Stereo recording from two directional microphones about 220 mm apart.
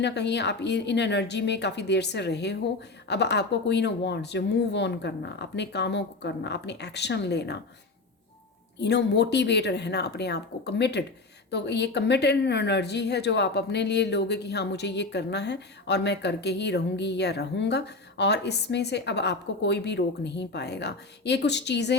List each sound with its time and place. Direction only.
0.0 s speech: 50° left (ahead or behind)
8.8 s speech: 50° left (ahead or behind)